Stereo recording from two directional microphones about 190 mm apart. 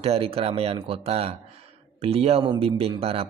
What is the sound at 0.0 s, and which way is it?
Speech, 30° right (ahead or behind).